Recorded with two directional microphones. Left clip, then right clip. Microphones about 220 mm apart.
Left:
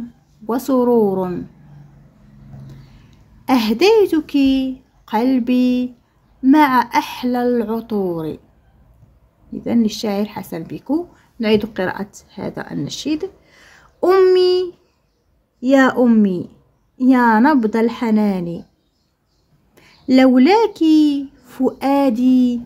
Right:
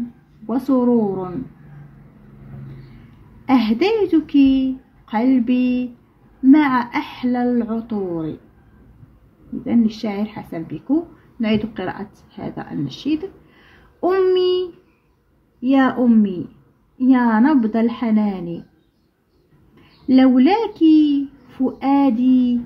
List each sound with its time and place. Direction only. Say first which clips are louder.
0.5 s a woman's voice: left 2 dB; 45° left (ahead or behind)
3.4 s a woman's voice: left 4 dB; 45° left (ahead or behind)
9.7 s a woman's voice: left 2 dB; 50° left (ahead or behind)
19.7 s speech: left 1 dB; 45° left (ahead or behind)